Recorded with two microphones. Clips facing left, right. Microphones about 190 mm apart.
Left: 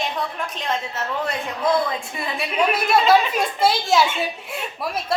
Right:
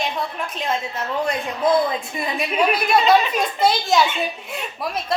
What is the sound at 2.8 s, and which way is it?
A woman's voice, 5° left (ahead or behind).